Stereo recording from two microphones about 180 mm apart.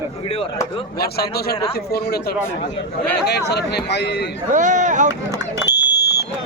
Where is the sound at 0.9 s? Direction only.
60° left (ahead or behind).